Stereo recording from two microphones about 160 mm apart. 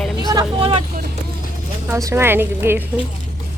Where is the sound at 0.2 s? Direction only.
25° right (ahead or behind).